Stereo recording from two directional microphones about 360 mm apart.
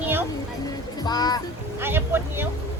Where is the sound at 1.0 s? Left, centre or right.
Centre.